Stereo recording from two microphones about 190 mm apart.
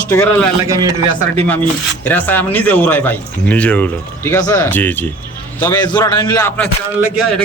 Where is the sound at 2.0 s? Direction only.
10° left (ahead or behind).